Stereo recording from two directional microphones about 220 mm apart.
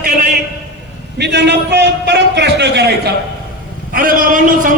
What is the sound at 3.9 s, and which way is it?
Speech, 40° right (ahead or behind).